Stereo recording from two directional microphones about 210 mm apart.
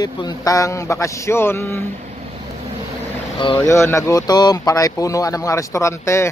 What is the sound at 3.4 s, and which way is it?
Speech, 20° left (ahead or behind).